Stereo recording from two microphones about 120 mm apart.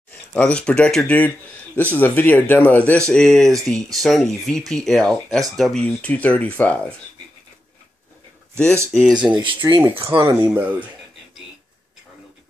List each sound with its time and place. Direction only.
0.1 s speech: 10° left (ahead or behind)
8.9 s speech: centre (ahead or behind)
9.4 s speech: 40° right (ahead or behind)
10.5 s speech: 15° right (ahead or behind)